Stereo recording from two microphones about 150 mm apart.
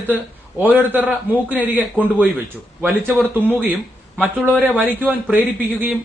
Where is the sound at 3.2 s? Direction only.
10° right (ahead or behind).